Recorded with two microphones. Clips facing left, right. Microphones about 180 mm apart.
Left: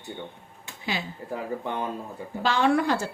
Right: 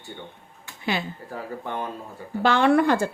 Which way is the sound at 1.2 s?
20° left (ahead or behind).